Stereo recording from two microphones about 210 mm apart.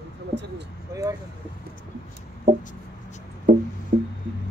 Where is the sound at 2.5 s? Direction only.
35° right (ahead or behind).